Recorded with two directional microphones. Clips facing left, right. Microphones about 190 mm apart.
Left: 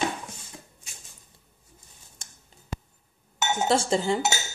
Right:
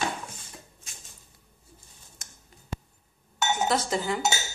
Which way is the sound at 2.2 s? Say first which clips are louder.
Left 1 dB; 30° left (ahead or behind).